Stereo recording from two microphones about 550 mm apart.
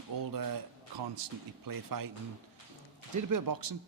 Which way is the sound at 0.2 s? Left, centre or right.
Right.